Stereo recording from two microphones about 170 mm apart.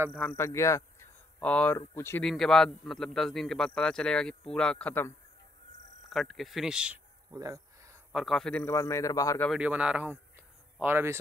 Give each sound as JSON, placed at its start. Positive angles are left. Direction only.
{"t": 0.2, "sound": "a man's voice", "side_deg": 15}
{"t": 2.2, "sound": "a man's voice", "side_deg": 0}
{"t": 7.2, "sound": "a sound", "side_deg": -20}
{"t": 8.1, "sound": "a man's voice", "side_deg": 0}
{"t": 9.5, "sound": "speech", "side_deg": -5}